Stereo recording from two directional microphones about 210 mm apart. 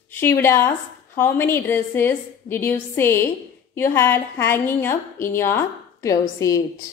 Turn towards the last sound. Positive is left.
turn(degrees=15)  # may be behind; listen again after turning